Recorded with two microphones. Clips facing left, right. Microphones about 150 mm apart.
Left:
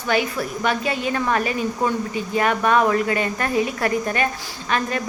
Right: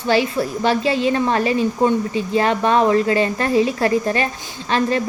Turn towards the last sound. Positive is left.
turn(degrees=-30)  # may be behind; listen again after turning